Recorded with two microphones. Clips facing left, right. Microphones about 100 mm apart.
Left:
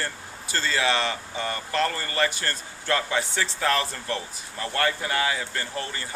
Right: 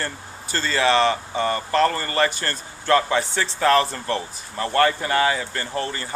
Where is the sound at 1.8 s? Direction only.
55° right (ahead or behind).